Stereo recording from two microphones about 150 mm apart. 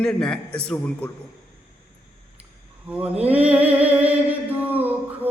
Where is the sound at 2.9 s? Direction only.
10° right (ahead or behind).